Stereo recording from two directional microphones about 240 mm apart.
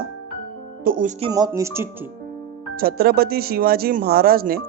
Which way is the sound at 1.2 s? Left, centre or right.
Centre.